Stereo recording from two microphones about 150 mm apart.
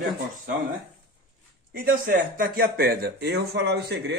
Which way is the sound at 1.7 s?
70° right (ahead or behind).